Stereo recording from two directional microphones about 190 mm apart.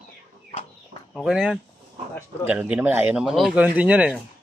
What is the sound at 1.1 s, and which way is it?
Speech, centre (ahead or behind).